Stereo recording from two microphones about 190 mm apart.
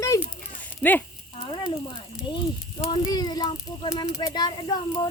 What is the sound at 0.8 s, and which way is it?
Speech, 10° left (ahead or behind).